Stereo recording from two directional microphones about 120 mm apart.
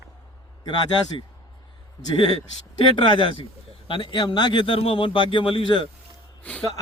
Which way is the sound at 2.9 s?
40° left (ahead or behind).